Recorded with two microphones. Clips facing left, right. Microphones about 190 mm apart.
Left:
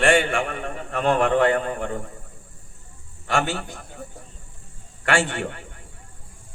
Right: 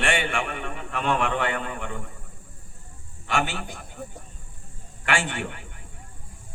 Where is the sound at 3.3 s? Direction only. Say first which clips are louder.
Left 3 dB; 40° left (ahead or behind).